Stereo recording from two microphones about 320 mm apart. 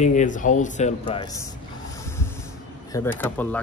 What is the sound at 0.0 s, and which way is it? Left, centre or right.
Speech, left.